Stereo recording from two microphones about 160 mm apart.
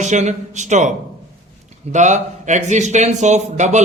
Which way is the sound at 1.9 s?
50° right (ahead or behind).